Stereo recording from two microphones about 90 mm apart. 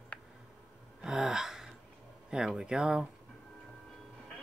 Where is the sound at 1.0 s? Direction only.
5° right (ahead or behind).